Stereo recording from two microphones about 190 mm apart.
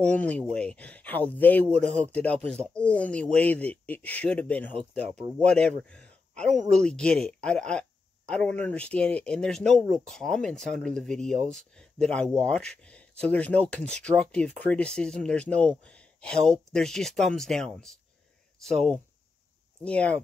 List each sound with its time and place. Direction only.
0.0 s speech: 5° left (ahead or behind)